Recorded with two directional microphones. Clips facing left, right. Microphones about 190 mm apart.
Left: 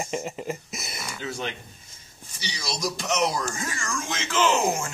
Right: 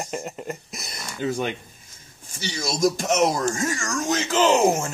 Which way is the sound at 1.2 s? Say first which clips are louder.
Right 8 dB; 50° right (ahead or behind).